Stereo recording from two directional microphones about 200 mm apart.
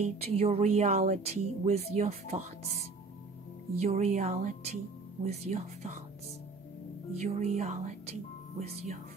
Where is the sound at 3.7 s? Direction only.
35° right (ahead or behind).